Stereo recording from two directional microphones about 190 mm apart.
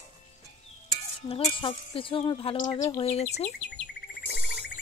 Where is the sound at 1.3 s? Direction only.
30° left (ahead or behind).